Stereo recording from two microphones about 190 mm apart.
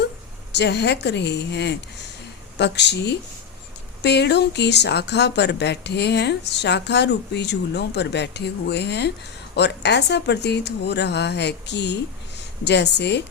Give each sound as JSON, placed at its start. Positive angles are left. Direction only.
{"t": 0.5, "sound": "speech", "side_deg": 65}